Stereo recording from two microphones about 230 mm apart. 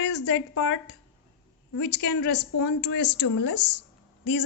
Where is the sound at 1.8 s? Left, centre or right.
Left.